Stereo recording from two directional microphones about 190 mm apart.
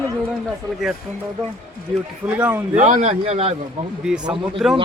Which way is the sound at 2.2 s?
10° right (ahead or behind).